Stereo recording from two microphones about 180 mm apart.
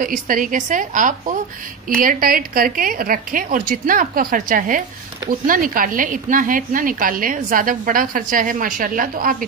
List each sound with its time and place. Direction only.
0.0 s a woman's voice: 50° right (ahead or behind)